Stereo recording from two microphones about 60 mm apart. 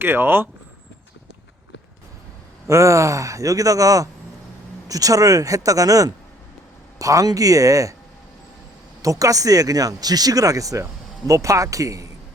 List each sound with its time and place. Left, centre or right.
0.0 s speech: right
2.6 s speech: right
9.0 s speech: right
11.3 s speech: right